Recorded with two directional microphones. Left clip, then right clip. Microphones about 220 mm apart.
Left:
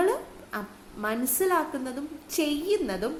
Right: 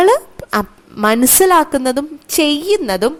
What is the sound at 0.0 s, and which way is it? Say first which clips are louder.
A woman's voice: right 15 dB; 40° right (ahead or behind).